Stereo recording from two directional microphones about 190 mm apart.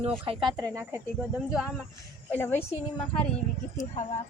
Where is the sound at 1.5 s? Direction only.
Centre (ahead or behind).